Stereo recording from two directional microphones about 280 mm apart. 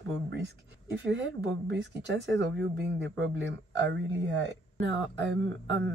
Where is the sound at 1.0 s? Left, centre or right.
Right.